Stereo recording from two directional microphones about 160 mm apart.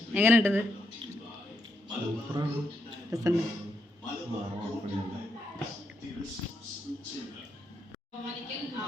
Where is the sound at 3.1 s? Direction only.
20° right (ahead or behind).